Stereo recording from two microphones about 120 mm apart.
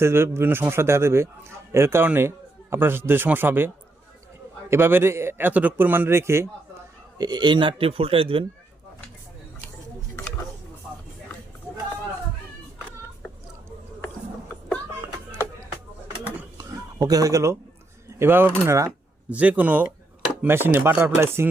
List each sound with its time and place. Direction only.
0.0 s a man's voice: 20° right (ahead or behind)
4.7 s a man's voice: 20° right (ahead or behind)
7.2 s speech: 35° right (ahead or behind)
16.6 s a sound: 30° right (ahead or behind)
18.2 s a man's voice: 20° right (ahead or behind)